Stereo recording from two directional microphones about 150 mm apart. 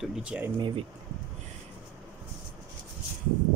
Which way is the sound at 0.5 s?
35° right (ahead or behind).